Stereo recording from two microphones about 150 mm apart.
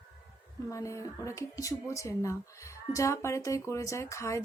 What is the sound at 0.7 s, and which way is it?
Speech, 20° left (ahead or behind).